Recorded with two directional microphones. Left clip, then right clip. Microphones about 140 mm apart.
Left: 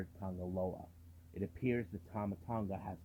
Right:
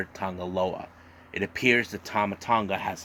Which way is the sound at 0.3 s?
45° right (ahead or behind).